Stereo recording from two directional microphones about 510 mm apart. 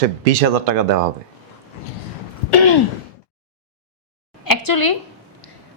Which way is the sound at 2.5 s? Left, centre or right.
Left.